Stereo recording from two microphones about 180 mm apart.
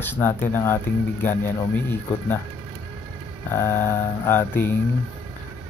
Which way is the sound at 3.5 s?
15° left (ahead or behind).